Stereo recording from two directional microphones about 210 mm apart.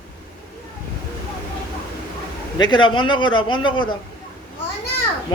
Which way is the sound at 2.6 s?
20° left (ahead or behind).